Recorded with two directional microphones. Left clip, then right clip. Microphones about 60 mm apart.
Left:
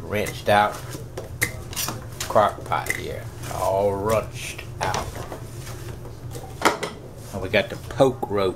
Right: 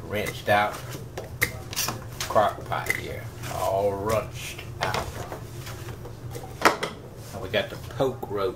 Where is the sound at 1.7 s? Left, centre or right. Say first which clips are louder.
Even; centre.